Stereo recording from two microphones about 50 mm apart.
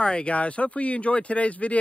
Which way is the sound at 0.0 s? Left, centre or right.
Left.